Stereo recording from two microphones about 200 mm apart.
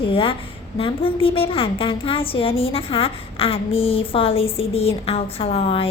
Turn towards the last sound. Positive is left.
turn(degrees=30)  # may be behind; listen again after turning